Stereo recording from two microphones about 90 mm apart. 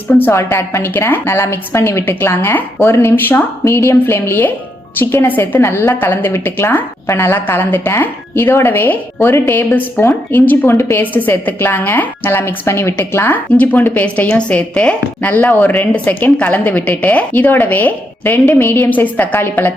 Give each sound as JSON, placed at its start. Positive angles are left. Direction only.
{"t": 0.1, "sound": "a woman's voice", "side_deg": 25}